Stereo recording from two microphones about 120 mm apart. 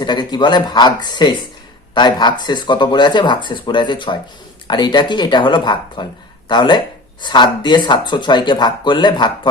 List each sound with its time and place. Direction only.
0.0 s speech: 35° left (ahead or behind)